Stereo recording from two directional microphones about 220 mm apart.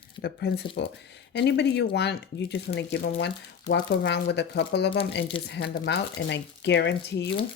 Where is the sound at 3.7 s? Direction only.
50° left (ahead or behind).